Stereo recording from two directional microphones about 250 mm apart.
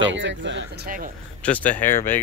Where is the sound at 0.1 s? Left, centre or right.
Right.